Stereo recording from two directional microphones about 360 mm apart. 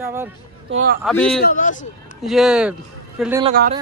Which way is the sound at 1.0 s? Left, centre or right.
Centre.